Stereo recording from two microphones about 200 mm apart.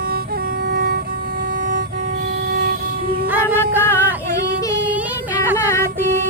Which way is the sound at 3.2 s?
10° right (ahead or behind).